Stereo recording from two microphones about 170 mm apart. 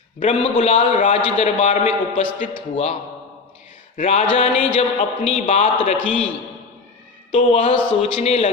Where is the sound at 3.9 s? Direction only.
40° left (ahead or behind).